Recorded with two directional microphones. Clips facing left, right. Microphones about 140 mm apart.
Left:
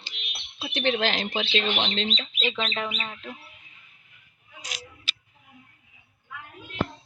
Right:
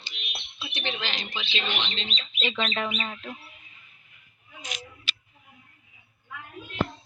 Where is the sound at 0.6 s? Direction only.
55° left (ahead or behind).